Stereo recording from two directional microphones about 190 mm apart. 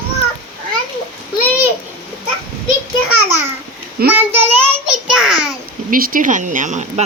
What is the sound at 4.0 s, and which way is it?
Speech, 50° right (ahead or behind).